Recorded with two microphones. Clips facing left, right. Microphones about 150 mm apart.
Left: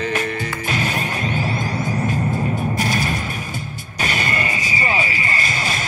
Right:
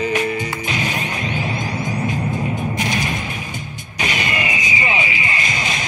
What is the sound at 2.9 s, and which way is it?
Music, 45° left (ahead or behind).